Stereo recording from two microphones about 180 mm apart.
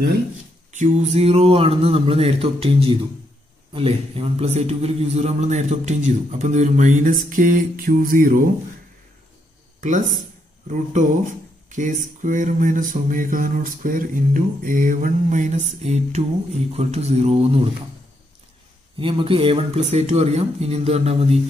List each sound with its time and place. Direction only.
0.7 s speech: 40° right (ahead or behind)
9.8 s speech: 45° right (ahead or behind)
18.9 s speech: 30° right (ahead or behind)